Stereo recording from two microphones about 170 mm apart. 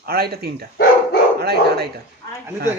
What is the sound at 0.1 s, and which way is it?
Speech, 65° right (ahead or behind).